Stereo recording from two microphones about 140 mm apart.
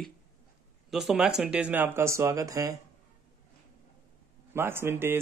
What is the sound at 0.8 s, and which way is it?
Speech, centre (ahead or behind).